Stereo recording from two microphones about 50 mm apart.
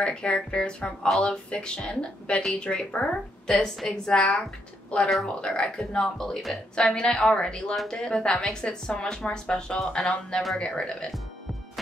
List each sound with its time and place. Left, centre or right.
0.0 s speech: centre
3.4 s a woman's voice: centre